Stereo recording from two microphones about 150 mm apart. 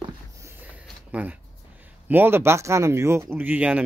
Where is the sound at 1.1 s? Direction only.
10° right (ahead or behind).